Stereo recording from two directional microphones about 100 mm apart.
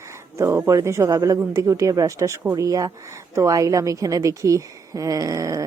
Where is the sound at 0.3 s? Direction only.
30° right (ahead or behind).